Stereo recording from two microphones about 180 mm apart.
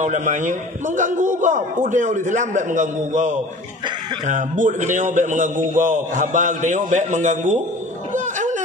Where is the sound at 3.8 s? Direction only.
25° right (ahead or behind).